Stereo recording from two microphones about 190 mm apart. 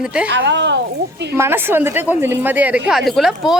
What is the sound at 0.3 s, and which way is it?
Speech, 70° right (ahead or behind).